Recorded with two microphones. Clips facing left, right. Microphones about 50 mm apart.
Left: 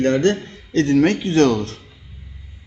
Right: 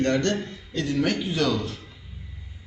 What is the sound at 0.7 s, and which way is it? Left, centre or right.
Speech, left.